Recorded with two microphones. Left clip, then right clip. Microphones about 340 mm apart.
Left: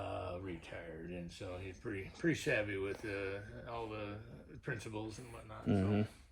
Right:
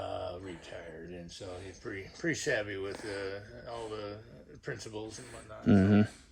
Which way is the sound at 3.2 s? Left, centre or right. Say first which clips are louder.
Right 3 dB; centre.